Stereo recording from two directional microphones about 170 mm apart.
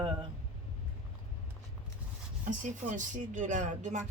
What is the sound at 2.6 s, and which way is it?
Speech, 50° right (ahead or behind).